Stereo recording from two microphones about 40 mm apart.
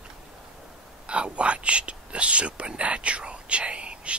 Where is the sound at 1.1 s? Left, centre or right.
Right.